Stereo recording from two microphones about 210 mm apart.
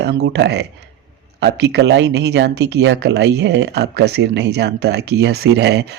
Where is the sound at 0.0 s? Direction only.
55° right (ahead or behind).